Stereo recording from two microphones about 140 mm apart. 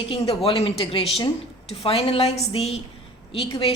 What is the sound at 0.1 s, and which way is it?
A woman's voice, 40° left (ahead or behind).